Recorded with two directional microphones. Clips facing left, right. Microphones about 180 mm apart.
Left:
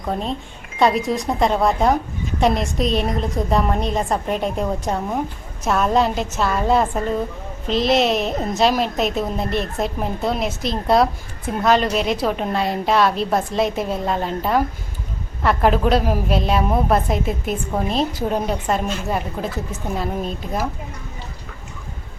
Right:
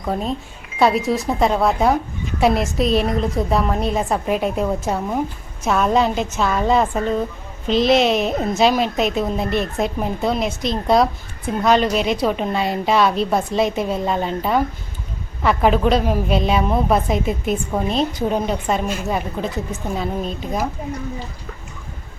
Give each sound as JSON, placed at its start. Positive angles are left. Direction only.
{"t": 0.0, "sound": "a woman's voice", "side_deg": 0}